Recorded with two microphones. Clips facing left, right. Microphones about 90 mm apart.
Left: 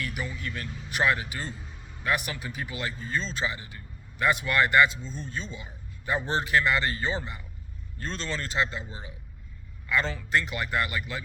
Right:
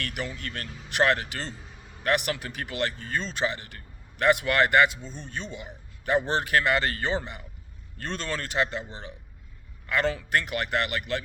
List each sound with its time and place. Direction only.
0.0 s speech: 65° right (ahead or behind)
10.2 s speech: 55° right (ahead or behind)